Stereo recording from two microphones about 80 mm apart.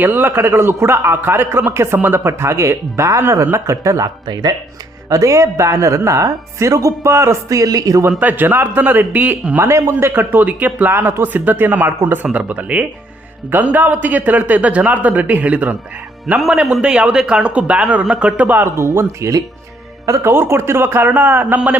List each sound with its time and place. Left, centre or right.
0.0 s speech: right
4.3 s speech: right
5.0 s speech: right
8.2 s a man's voice: right
9.6 s a man's voice: right; by 15.7 s centre
16.4 s a man's voice: centre
18.6 s a man's voice: right